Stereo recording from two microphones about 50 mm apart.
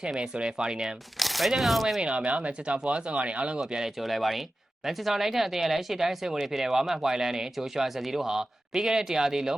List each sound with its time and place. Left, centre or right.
0.2 s speech: centre
1.2 s speech: centre
2.0 s speech: right
4.0 s speech: centre